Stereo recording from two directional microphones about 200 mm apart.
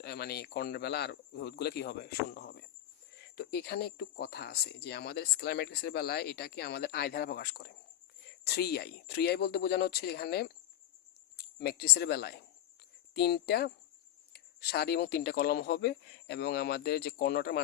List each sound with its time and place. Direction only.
0.0 s speech: 55° left (ahead or behind)